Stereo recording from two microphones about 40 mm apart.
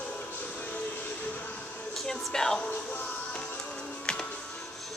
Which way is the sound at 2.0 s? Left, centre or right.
Centre.